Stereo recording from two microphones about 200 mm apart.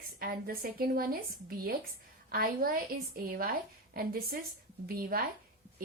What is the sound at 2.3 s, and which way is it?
A woman's voice, 45° right (ahead or behind).